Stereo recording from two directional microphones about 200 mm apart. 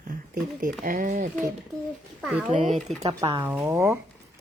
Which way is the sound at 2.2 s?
5° right (ahead or behind).